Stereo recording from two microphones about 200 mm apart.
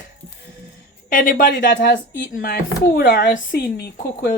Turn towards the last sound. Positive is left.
turn(degrees=50)  # may be behind; listen again after turning